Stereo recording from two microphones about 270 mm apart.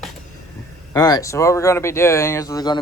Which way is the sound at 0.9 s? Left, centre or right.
Centre.